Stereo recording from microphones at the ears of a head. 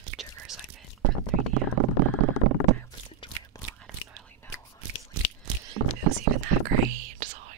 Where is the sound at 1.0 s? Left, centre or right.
Right.